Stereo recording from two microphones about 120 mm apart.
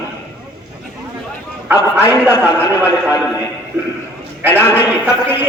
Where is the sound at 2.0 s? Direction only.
15° right (ahead or behind).